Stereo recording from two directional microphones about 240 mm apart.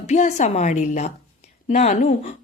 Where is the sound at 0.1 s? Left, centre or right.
Left.